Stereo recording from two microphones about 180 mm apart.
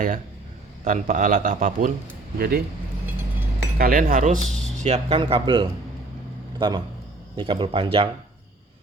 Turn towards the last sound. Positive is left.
turn(degrees=-30)  # may be behind; listen again after turning